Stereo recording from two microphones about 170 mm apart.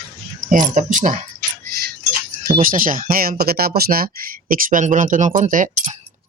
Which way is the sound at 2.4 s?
55° right (ahead or behind).